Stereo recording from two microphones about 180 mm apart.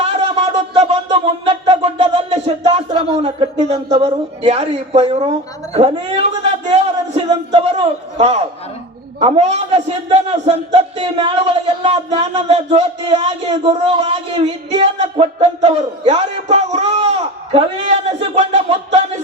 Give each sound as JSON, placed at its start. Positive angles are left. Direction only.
{"t": 0.5, "sound": "music", "side_deg": -35}
{"t": 3.2, "sound": "a man's voice", "side_deg": -35}